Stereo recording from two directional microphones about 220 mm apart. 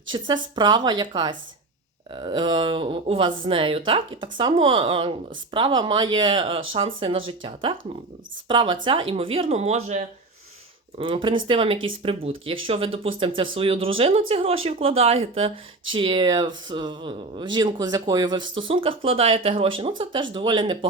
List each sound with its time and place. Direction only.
0.1 s speech: 20° right (ahead or behind)